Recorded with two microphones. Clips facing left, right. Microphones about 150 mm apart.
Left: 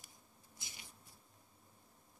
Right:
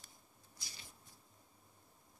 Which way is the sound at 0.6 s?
20° left (ahead or behind).